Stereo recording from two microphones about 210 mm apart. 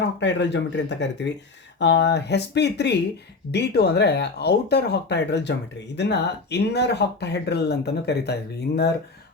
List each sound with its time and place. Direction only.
0.2 s speech: 55° left (ahead or behind)